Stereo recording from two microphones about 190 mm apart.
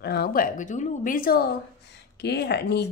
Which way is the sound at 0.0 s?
60° left (ahead or behind).